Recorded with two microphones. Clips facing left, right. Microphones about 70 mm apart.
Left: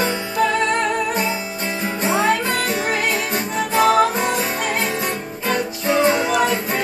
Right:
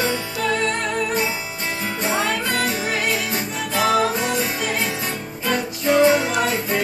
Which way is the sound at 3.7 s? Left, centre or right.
Left.